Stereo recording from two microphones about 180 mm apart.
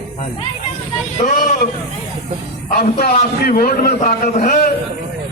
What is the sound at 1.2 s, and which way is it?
Speech, 45° left (ahead or behind).